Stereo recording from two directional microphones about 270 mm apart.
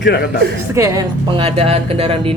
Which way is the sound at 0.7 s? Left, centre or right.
Centre.